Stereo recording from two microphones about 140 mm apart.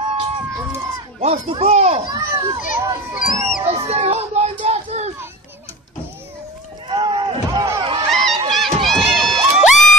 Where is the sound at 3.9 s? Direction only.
50° right (ahead or behind).